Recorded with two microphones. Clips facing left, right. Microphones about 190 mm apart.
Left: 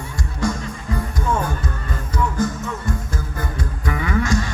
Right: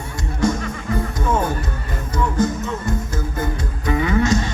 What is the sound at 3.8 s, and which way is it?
Music, 25° right (ahead or behind).